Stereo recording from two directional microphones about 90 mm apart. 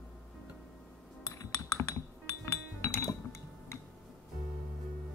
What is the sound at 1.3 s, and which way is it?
Music, 35° left (ahead or behind).